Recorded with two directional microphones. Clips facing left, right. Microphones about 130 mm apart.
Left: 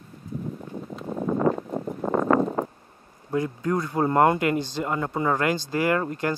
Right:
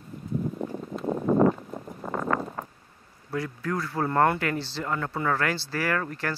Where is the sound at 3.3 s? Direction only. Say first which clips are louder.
Left 5 dB; 20° left (ahead or behind).